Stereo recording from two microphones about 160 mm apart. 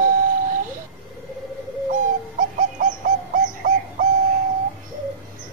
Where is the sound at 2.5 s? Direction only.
55° right (ahead or behind).